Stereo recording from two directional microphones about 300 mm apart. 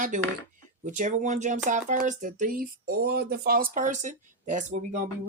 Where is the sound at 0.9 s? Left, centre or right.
Right.